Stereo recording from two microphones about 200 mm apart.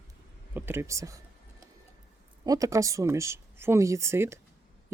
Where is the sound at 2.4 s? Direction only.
15° right (ahead or behind).